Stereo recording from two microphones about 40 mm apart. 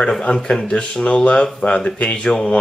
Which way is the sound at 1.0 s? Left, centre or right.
Left.